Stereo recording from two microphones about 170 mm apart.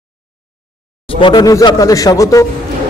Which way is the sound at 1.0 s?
30° left (ahead or behind).